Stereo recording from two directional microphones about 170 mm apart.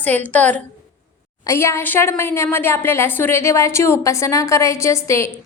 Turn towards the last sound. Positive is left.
turn(degrees=15)  # may be behind; listen again after turning